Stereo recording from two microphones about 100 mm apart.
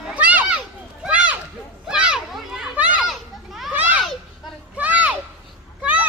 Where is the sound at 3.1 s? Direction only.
Centre (ahead or behind).